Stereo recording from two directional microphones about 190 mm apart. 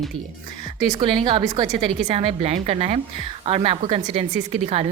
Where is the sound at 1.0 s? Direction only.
25° right (ahead or behind).